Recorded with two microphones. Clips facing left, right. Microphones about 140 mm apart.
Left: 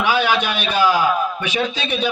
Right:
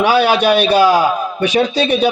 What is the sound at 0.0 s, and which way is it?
A man's voice, 35° right (ahead or behind).